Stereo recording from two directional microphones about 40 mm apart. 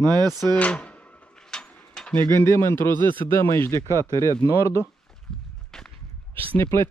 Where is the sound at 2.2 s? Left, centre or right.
Left.